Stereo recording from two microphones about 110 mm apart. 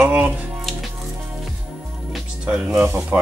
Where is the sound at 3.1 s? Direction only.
15° right (ahead or behind).